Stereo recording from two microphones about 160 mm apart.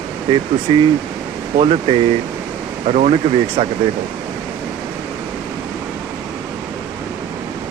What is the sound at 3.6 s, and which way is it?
Speech, 35° right (ahead or behind).